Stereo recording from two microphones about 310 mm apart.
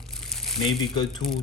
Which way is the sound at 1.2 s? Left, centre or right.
Centre.